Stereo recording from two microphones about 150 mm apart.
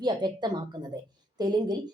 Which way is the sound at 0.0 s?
30° right (ahead or behind).